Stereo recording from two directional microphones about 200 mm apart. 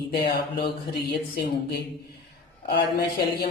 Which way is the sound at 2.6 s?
50° left (ahead or behind).